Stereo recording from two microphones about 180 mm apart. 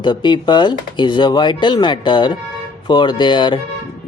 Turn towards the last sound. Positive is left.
turn(degrees=25)  # may be behind; listen again after turning